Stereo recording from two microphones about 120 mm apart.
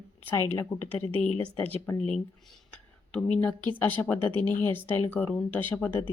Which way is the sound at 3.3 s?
15° left (ahead or behind).